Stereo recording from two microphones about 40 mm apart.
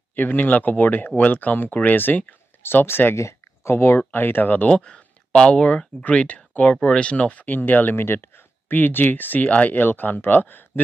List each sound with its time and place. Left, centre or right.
0.1 s speech: left
2.6 s speech: left
3.6 s speech: left
4.1 s speech: left
4.6 s speech: left
6.0 s speech: left
7.4 s speech: left
7.9 s speech: left
8.6 s speech: left
9.8 s speech: left